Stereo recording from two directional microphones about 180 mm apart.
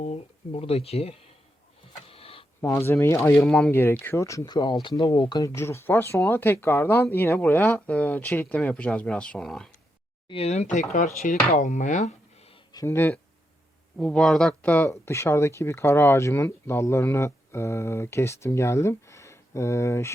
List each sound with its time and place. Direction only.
0.0 s speech: 40° left (ahead or behind)
2.0 s a sound: 30° left (ahead or behind)
2.6 s speech: 15° left (ahead or behind)
3.4 s speech: centre (ahead or behind)
3.7 s speech: 10° left (ahead or behind)
10.2 s speech: 35° left (ahead or behind)
12.7 s speech: 15° left (ahead or behind)